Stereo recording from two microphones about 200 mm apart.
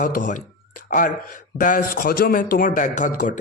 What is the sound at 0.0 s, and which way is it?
Speech, 40° left (ahead or behind).